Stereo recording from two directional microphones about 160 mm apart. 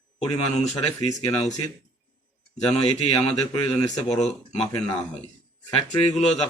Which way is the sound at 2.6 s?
25° left (ahead or behind).